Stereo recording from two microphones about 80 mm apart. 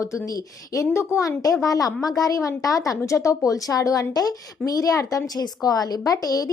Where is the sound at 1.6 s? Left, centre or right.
Left.